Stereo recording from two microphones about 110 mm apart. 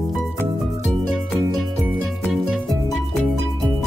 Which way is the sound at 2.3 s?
Centre (ahead or behind).